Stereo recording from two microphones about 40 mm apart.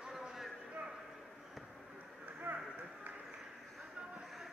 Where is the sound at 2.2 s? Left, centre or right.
Right.